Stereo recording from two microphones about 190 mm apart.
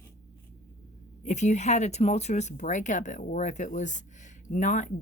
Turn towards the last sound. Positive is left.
turn(degrees=40)  # may be behind; listen again after turning